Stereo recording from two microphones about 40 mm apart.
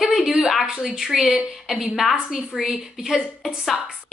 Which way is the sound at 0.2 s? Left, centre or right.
Right.